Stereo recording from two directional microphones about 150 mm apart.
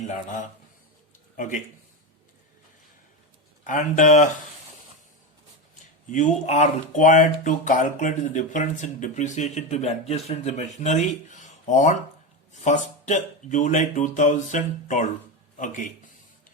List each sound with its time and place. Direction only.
1.4 s speech: 60° left (ahead or behind)
3.6 s speech: 60° left (ahead or behind)
6.1 s speech: 55° left (ahead or behind)